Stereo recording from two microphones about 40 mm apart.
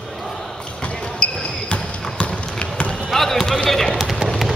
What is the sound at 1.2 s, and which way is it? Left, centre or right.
Basketball bounce, left.